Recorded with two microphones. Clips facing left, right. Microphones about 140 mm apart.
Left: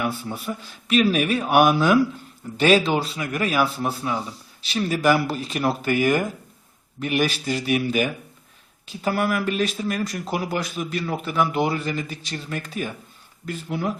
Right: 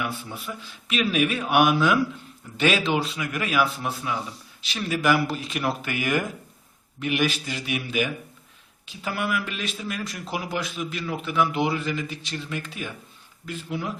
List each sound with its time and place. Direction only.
0.0 s a man's voice: 40° left (ahead or behind)